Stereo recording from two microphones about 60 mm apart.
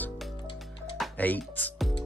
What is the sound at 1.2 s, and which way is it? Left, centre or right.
Speech, left.